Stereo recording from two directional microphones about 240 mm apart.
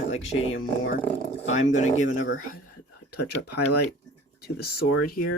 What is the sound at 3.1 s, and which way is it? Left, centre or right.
Speech, left.